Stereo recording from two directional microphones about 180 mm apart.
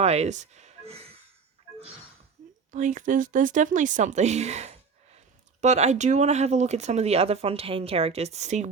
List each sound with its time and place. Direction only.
0.0 s speech: 35° right (ahead or behind)
2.7 s speech: 45° right (ahead or behind)